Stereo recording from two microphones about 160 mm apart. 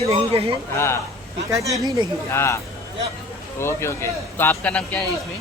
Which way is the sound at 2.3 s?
15° left (ahead or behind).